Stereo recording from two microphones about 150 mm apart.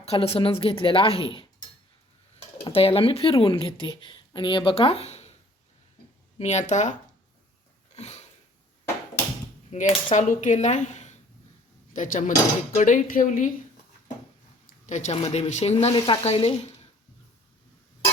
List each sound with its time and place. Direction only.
0.0 s speech: 40° left (ahead or behind)
2.6 s speech: 40° left (ahead or behind)
6.4 s speech: 50° left (ahead or behind)
7.9 s a sound: 45° left (ahead or behind)
9.7 s a woman's voice: 55° left (ahead or behind)
14.8 s speech: 55° left (ahead or behind)